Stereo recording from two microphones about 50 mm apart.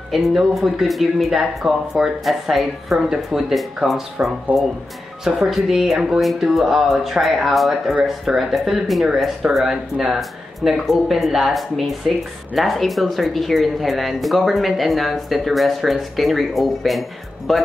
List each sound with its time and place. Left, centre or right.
0.1 s speech: centre
4.5 s speech: right
5.2 s speech: centre